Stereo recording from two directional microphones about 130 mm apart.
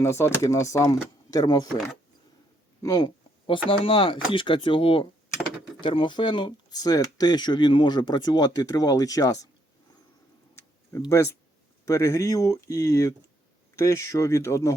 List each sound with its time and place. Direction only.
0.0 s speech: 20° left (ahead or behind)
2.8 s speech: 30° left (ahead or behind)
3.7 s speech: 45° left (ahead or behind); by 9.5 s 25° left (ahead or behind)
11.9 s speech: 20° left (ahead or behind)